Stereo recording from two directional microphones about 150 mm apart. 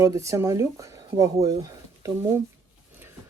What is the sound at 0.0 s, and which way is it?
Speech, 20° right (ahead or behind).